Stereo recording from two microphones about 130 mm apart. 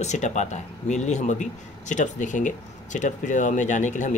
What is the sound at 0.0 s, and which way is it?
Speech, 65° left (ahead or behind).